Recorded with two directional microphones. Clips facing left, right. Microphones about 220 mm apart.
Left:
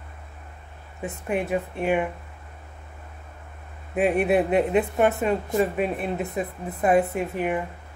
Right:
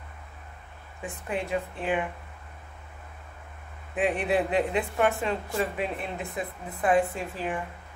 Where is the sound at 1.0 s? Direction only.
20° left (ahead or behind).